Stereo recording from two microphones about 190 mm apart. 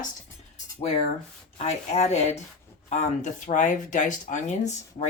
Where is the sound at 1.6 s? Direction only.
35° left (ahead or behind).